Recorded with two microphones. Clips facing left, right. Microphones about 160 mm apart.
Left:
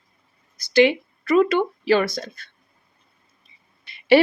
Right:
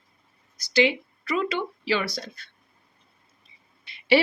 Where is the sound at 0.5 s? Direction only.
55° left (ahead or behind).